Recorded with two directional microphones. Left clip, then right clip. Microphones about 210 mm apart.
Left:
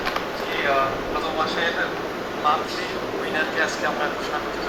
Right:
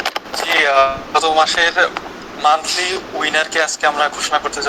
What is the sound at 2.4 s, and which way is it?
Speech, 45° right (ahead or behind).